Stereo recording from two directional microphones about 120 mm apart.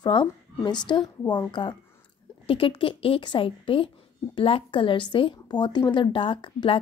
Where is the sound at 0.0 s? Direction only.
40° left (ahead or behind).